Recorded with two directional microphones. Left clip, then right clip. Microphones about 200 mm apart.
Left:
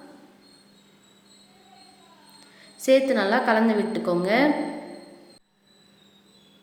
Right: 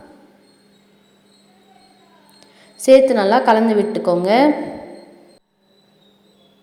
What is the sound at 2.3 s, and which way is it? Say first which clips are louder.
A woman's voice: right 6 dB; 25° right (ahead or behind).